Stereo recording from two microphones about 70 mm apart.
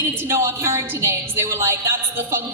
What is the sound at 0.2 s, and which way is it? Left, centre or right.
A woman's voice, right.